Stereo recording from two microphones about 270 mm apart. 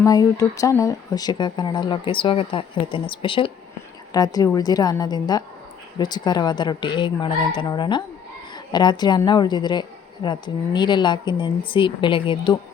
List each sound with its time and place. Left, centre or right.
0.0 s speech: centre